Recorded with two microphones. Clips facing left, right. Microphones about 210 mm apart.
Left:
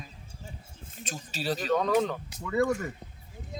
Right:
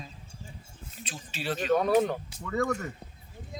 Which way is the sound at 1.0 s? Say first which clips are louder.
Left 2 dB; 45° left (ahead or behind).